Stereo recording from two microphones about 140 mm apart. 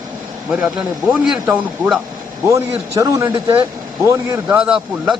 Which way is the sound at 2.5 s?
20° right (ahead or behind).